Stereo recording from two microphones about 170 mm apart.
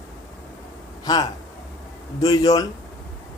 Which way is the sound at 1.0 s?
25° left (ahead or behind).